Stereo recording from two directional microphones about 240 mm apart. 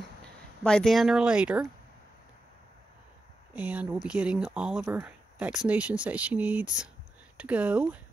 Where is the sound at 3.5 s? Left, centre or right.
Centre.